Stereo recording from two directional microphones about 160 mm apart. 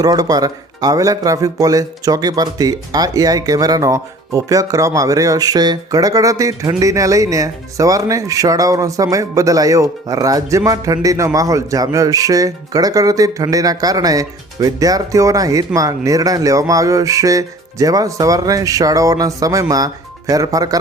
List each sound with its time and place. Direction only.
0.0 s speech: 25° right (ahead or behind)